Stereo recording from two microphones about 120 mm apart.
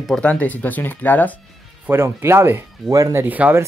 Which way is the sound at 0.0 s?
5° left (ahead or behind).